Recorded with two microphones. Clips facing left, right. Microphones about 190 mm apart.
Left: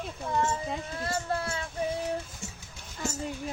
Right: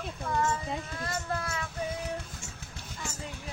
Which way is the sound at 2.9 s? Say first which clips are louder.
Left 7 dB; 45° left (ahead or behind).